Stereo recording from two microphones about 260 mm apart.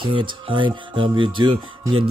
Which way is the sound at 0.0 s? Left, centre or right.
Centre.